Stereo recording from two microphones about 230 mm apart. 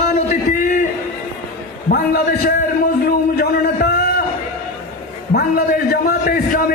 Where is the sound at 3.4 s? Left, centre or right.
Left.